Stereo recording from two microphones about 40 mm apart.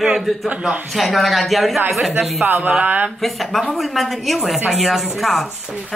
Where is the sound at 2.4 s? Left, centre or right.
Right.